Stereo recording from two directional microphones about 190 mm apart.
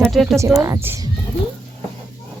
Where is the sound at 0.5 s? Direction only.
15° right (ahead or behind).